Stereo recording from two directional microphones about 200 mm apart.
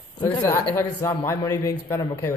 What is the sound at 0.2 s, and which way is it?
Speech, 15° left (ahead or behind).